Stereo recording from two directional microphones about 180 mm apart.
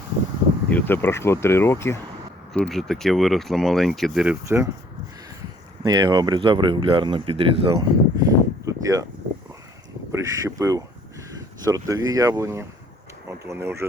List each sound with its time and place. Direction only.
0.7 s speech: 10° left (ahead or behind)
2.5 s speech: centre (ahead or behind)
4.4 s speech: 15° right (ahead or behind)
5.8 s speech: 20° right (ahead or behind)
7.7 s a sound: 20° right (ahead or behind)
10.1 s speech: 15° right (ahead or behind)